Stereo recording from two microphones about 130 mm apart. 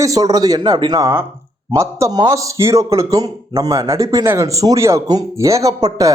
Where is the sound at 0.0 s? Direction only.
25° right (ahead or behind).